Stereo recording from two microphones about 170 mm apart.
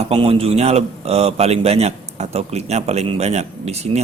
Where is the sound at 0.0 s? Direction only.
35° right (ahead or behind).